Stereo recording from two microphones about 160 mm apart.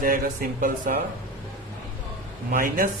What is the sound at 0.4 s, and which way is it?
Speech, 70° right (ahead or behind).